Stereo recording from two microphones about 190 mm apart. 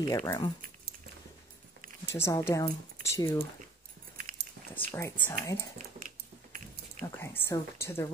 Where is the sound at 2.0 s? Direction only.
15° left (ahead or behind).